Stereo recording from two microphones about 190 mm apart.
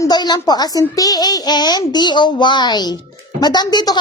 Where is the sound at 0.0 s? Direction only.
20° left (ahead or behind).